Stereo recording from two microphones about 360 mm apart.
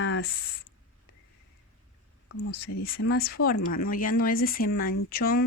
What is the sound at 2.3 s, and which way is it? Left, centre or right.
Speech, left.